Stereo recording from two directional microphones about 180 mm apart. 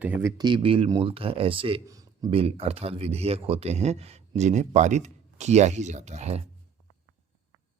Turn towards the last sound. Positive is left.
turn(degrees=-40)  # may be behind; listen again after turning